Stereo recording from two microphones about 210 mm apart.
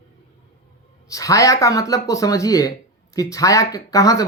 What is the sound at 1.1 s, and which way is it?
Speech, 15° left (ahead or behind).